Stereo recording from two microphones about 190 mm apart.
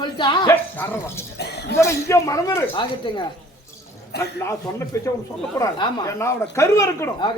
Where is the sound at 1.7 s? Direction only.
15° left (ahead or behind).